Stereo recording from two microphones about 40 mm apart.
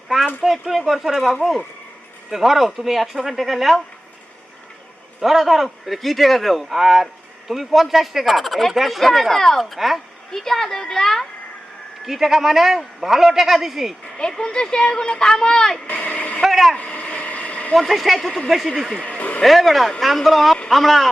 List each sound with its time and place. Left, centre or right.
0.4 s speech: centre
5.2 s speech: centre
10.3 s speech: centre
12.0 s speech: centre
14.2 s speech: centre
15.9 s speech: left
16.4 s a sound: centre
16.7 s a sound: left
17.7 s speech: centre